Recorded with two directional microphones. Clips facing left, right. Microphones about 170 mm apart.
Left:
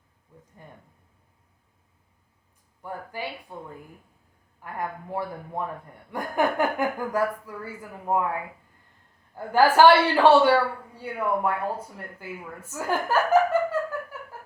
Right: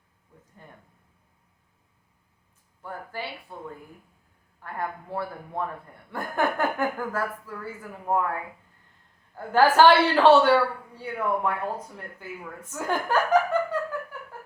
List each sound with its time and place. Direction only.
2.8 s a woman's voice: 15° left (ahead or behind)
9.3 s a woman's voice: 10° left (ahead or behind)